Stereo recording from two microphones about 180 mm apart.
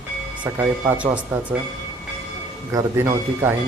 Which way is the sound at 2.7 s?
15° right (ahead or behind).